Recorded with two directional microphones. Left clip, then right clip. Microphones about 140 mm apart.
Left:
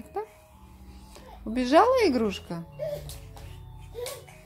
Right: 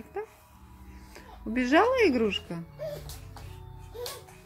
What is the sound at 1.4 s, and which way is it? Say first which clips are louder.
Speech: left 3 dB; 10° left (ahead or behind).